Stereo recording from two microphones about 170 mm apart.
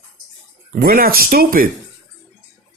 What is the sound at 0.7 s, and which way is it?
Speech, 60° right (ahead or behind).